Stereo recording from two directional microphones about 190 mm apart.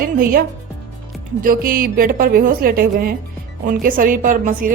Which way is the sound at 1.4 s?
50° right (ahead or behind).